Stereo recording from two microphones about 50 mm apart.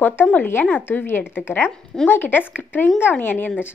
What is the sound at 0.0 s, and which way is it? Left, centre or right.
A woman's voice, left.